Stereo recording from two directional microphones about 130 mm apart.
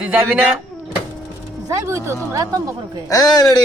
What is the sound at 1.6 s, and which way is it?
Speech, 25° right (ahead or behind).